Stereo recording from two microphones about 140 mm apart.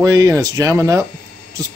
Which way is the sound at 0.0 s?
25° right (ahead or behind).